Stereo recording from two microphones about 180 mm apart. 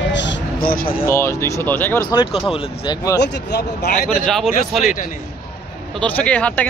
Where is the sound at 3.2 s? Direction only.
65° left (ahead or behind).